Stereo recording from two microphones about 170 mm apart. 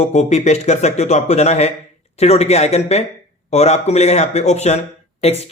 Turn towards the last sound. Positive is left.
turn(degrees=35)  # may be behind; listen again after turning